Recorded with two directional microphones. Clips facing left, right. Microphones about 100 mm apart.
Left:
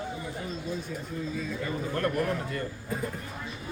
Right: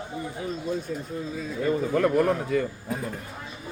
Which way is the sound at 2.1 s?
90° right.